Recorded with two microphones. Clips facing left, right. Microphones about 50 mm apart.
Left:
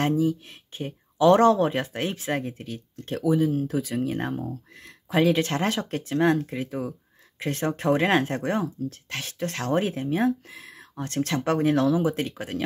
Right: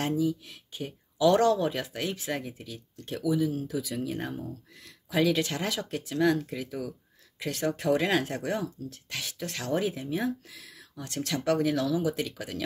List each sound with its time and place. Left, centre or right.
0.0 s speech: left